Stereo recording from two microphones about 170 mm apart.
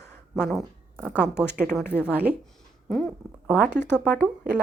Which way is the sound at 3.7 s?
90° right.